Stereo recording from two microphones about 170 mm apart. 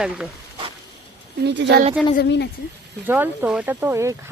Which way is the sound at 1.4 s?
90° right.